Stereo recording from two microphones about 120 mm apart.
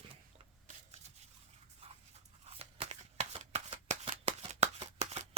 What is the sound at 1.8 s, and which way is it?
Dog, 55° right (ahead or behind).